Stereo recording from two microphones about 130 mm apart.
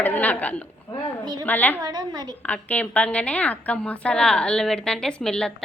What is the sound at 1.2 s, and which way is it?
Speech, 30° right (ahead or behind).